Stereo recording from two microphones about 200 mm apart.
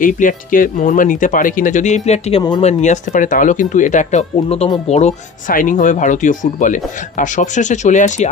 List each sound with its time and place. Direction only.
0.0 s speech: 40° left (ahead or behind)